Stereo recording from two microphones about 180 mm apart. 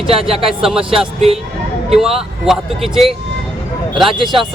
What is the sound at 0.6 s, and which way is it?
Speech, centre (ahead or behind).